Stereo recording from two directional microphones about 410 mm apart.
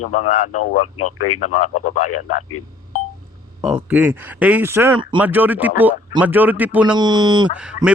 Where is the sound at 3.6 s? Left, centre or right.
Centre.